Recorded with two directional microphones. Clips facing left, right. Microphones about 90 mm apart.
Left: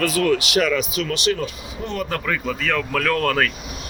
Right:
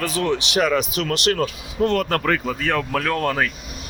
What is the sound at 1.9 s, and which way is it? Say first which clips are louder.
Speech: right 1 dB; 80° right.